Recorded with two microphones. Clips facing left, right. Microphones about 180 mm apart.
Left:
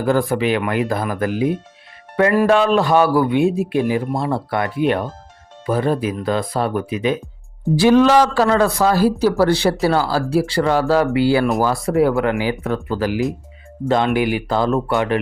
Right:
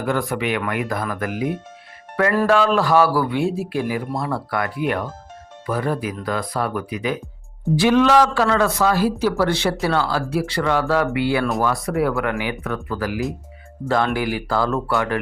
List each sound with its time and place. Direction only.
0.0 s a man's voice: 30° left (ahead or behind)
7.8 s a man's voice: 35° left (ahead or behind); by 15.2 s 20° left (ahead or behind)